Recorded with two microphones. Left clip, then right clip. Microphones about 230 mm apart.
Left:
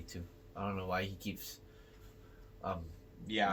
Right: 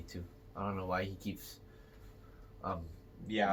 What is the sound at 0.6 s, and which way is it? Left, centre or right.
Speech, centre.